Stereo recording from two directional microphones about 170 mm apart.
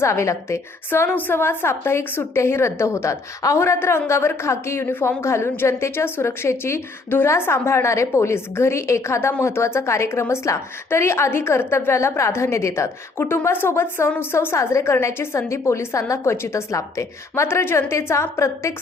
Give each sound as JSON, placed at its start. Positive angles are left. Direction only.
{"t": 0.0, "sound": "a woman's voice", "side_deg": 15}